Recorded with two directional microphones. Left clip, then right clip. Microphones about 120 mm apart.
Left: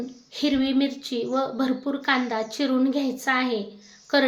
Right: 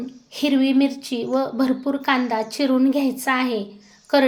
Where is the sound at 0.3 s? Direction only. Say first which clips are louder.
Right 4 dB; 25° right (ahead or behind).